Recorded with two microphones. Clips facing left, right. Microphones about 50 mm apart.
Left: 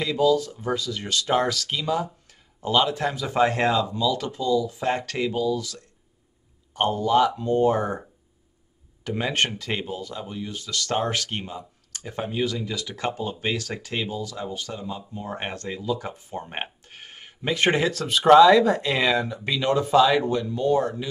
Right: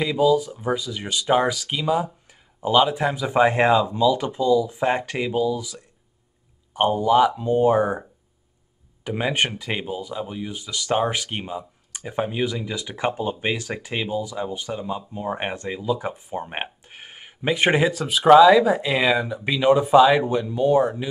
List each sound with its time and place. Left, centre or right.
0.0 s speech: centre
9.0 s speech: centre